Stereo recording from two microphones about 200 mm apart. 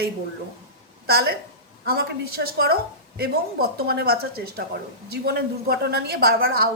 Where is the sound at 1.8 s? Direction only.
50° right (ahead or behind).